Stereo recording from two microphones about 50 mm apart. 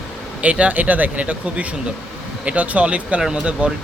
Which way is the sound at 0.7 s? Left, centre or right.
Right.